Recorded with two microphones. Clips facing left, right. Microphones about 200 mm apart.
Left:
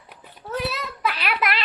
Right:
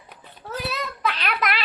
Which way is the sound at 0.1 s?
5° left (ahead or behind).